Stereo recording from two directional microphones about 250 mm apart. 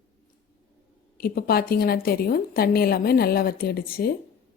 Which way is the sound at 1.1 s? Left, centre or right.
Left.